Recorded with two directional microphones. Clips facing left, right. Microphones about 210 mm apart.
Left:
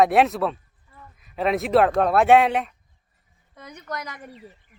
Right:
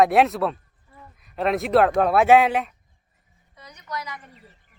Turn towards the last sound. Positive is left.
turn(degrees=50)  # may be behind; listen again after turning